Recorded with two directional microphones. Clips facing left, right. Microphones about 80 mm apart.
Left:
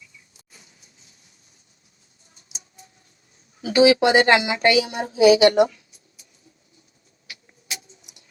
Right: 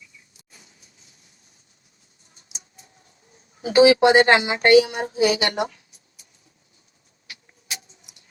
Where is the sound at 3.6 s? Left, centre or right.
Right.